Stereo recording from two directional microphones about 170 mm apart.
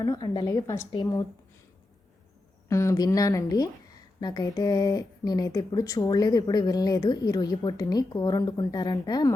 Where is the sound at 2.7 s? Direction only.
15° left (ahead or behind).